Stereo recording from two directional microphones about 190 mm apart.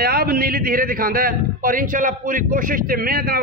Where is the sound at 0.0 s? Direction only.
55° right (ahead or behind).